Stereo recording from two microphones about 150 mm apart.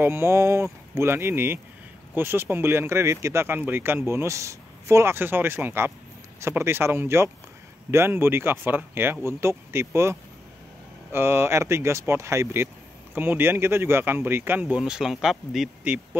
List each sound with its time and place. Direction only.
0.0 s speech: 15° right (ahead or behind)